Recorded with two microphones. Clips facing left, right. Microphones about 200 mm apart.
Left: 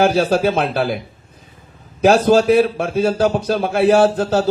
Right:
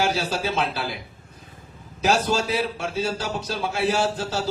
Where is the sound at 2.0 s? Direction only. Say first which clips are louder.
Left 10 dB; 55° left (ahead or behind).